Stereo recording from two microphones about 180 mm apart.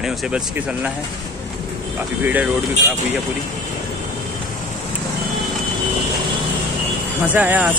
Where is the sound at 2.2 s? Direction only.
10° right (ahead or behind).